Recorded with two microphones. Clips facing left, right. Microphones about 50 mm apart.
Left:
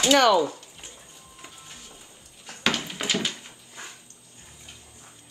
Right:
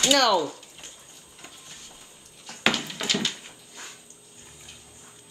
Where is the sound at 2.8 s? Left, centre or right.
Centre.